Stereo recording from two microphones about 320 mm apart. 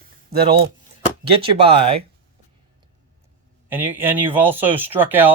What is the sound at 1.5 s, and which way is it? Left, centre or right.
Speech, centre.